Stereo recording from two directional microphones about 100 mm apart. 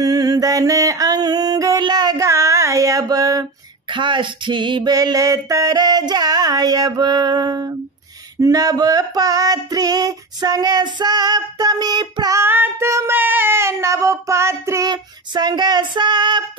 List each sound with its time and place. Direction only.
0.0 s mantra: 40° right (ahead or behind)
1.8 s a sound: 45° right (ahead or behind)
2.2 s female singing: 30° right (ahead or behind)
3.9 s female singing: 55° right (ahead or behind)
4.9 s a sound: 35° right (ahead or behind)
12.4 s child singing: 20° right (ahead or behind)
15.3 s female singing: 45° right (ahead or behind)